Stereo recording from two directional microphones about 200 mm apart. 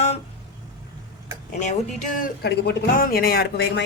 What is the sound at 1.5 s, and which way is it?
Speech, 40° left (ahead or behind).